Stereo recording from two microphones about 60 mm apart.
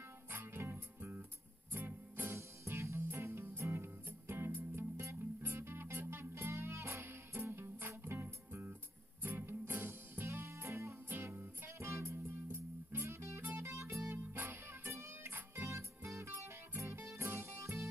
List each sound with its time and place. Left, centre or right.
0.3 s music: right